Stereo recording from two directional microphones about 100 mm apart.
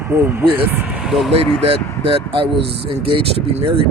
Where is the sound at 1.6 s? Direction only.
80° right.